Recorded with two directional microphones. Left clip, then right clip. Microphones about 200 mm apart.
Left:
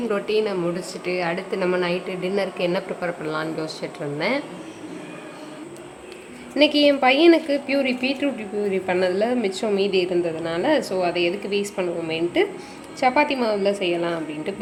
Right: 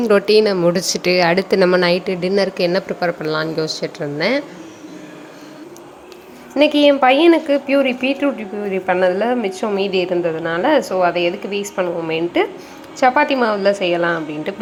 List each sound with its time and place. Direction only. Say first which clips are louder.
0.1 s a woman's voice: right 10 dB; 35° right (ahead or behind)
6.8 s a woman's voice: right 5 dB; centre (ahead or behind)